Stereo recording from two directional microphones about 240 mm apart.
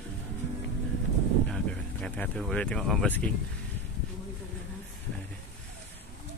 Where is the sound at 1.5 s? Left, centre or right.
Centre.